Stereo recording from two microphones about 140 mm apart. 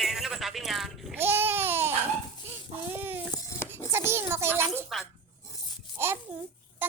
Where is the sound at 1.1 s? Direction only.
15° right (ahead or behind).